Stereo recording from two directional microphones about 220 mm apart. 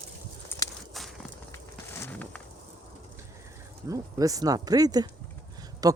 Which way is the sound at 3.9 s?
15° right (ahead or behind).